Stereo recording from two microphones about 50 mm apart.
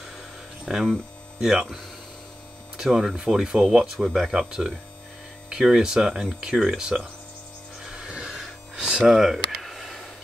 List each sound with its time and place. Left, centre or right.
0.7 s speech: centre
2.9 s speech: centre
7.8 s music: centre
9.0 s a sound: centre